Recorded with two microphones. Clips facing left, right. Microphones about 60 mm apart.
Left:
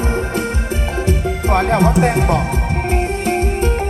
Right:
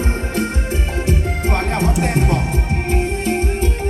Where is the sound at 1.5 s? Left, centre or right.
Left.